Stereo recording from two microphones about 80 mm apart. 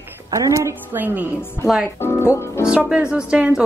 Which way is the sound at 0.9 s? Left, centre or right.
Right.